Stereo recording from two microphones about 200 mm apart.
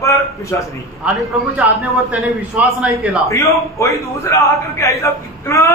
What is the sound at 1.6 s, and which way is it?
A man's voice, 5° right (ahead or behind).